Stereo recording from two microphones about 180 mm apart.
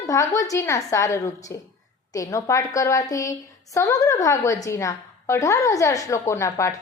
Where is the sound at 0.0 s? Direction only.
15° left (ahead or behind).